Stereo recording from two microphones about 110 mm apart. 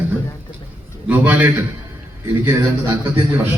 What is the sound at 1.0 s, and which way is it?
A man's voice, 15° right (ahead or behind).